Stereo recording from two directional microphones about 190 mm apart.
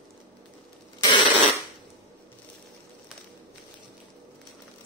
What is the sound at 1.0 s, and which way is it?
Fart, 25° left (ahead or behind).